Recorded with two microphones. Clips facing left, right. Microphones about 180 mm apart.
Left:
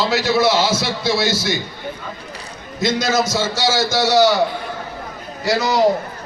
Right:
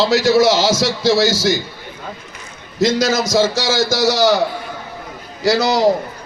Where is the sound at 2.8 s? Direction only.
80° right.